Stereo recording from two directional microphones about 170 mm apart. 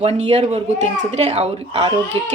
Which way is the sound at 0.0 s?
40° right (ahead or behind).